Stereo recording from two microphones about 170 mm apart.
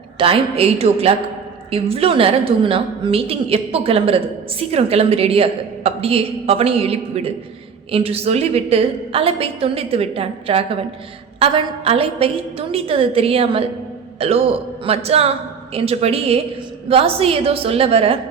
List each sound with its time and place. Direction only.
0.2 s a woman's voice: 35° right (ahead or behind)